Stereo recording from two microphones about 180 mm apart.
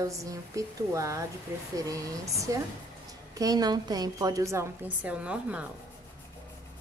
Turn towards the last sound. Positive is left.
turn(degrees=-5)  # may be behind; listen again after turning